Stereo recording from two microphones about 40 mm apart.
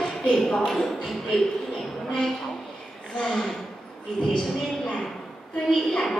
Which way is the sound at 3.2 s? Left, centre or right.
Centre.